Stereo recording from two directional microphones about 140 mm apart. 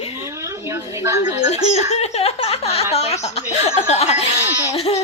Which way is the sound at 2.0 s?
45° left (ahead or behind).